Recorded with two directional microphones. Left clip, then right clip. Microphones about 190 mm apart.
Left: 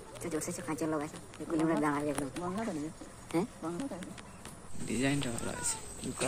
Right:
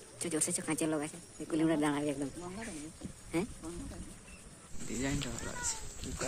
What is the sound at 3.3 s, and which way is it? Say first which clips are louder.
Speech: left 2 dB; 25° right (ahead or behind).